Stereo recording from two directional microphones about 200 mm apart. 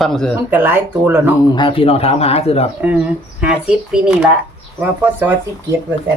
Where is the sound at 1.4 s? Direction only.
25° left (ahead or behind).